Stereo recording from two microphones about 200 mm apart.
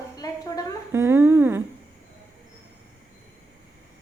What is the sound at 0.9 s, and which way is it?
Speech, 10° right (ahead or behind).